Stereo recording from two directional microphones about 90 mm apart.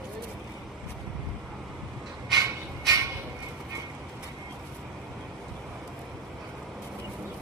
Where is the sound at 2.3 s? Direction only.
40° right (ahead or behind).